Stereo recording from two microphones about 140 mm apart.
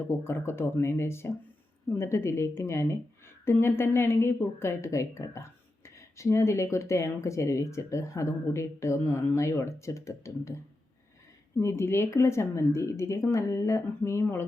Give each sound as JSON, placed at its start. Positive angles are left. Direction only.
{"t": 0.0, "sound": "speech", "side_deg": 15}
{"t": 11.5, "sound": "speech", "side_deg": 20}